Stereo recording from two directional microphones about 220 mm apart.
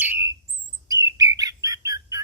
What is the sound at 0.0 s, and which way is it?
Bird, 10° right (ahead or behind).